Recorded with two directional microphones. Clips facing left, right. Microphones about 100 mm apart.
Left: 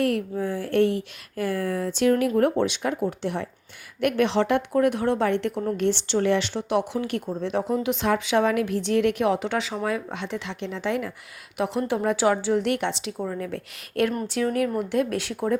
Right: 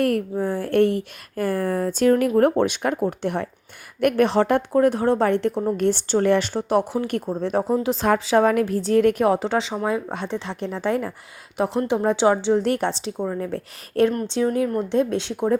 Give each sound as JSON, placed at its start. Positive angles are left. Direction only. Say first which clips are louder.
{"t": 0.0, "sound": "a woman's voice", "louder": "right 3 dB", "side_deg": -45}
{"t": 11.8, "sound": "a woman's voice", "louder": "right 3 dB", "side_deg": -25}